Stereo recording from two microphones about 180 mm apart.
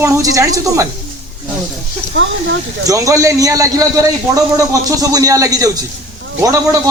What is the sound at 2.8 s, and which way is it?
A man's voice, 20° right (ahead or behind).